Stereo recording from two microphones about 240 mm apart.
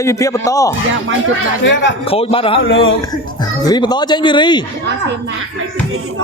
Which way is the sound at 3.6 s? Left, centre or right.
Centre.